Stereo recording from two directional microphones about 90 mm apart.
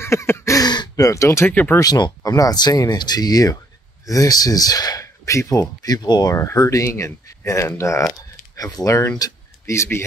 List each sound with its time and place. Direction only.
0.0 s a sound: 30° left (ahead or behind)
0.6 s gasp: 45° left (ahead or behind)
1.5 s speech: 20° left (ahead or behind)
1.8 s speech: 50° left (ahead or behind)
5.0 s speech: 35° left (ahead or behind)
6.3 s speech: 35° left (ahead or behind)